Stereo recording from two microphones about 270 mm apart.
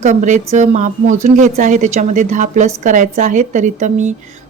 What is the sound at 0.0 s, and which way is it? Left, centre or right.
Speech, right.